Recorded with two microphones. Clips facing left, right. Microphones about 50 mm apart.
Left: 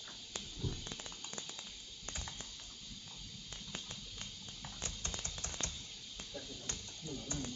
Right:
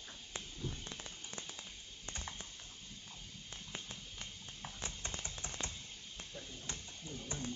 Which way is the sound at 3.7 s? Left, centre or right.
Centre.